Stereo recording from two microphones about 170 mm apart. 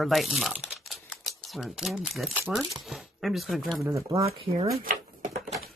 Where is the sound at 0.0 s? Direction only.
Centre (ahead or behind).